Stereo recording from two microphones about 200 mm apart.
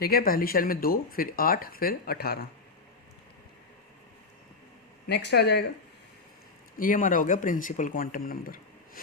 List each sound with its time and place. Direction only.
0.0 s speech: 50° left (ahead or behind)
5.0 s speech: 55° left (ahead or behind)
6.7 s speech: 45° left (ahead or behind)